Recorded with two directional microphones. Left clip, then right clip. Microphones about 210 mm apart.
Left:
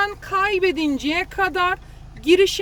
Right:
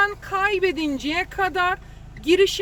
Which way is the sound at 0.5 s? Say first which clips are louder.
Left 2 dB; 45° left (ahead or behind).